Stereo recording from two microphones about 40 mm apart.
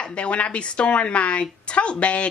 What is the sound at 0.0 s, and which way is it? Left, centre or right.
A woman's voice, left.